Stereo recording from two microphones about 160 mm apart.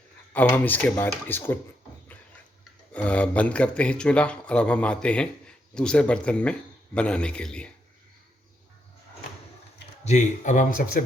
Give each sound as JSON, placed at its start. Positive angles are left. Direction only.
{"t": 0.5, "sound": "speech", "side_deg": 10}
{"t": 2.9, "sound": "speech", "side_deg": 10}
{"t": 10.0, "sound": "speech", "side_deg": 45}